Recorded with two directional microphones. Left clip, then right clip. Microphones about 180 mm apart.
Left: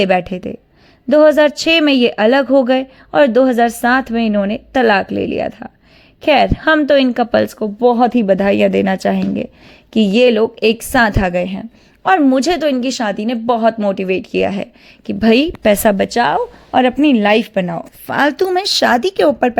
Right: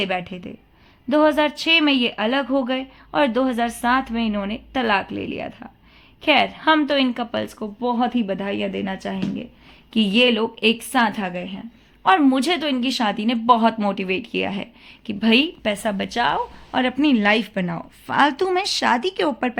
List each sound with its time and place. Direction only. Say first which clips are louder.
0.0 s a woman's voice: left 10 dB; 40° left (ahead or behind)
9.9 s speech: left 6 dB; 30° left (ahead or behind); by 11.6 s 45° left (ahead or behind)
12.0 s speech: left 5 dB; 25° left (ahead or behind)